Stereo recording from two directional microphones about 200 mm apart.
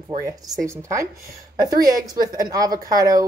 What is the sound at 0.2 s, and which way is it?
A woman's voice, 15° right (ahead or behind).